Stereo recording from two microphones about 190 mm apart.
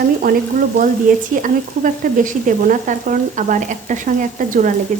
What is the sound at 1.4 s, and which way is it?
Frying, 45° right (ahead or behind).